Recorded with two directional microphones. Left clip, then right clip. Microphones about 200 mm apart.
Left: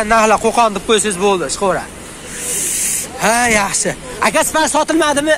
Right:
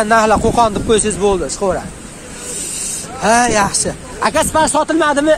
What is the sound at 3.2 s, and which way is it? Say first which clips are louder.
Speech: right 1 dB; 5° left (ahead or behind).